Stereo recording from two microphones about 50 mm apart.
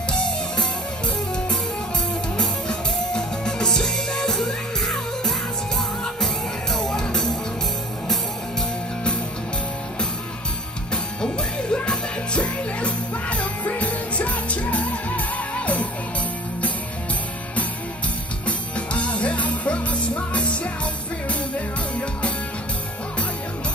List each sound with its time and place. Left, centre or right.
0.1 s music: centre
2.7 s music: centre
11.1 s music: centre
18.9 s music: left